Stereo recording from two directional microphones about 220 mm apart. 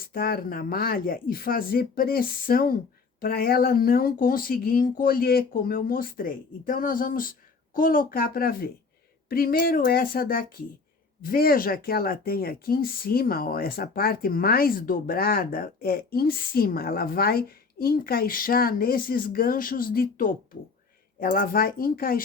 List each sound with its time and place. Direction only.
0.0 s speech: 45° left (ahead or behind)